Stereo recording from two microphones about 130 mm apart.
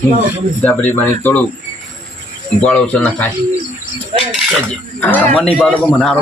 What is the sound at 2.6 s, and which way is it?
Speech, 10° left (ahead or behind).